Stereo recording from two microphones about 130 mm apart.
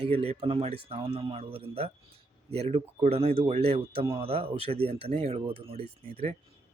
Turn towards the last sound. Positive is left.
turn(degrees=-50)  # may be behind; listen again after turning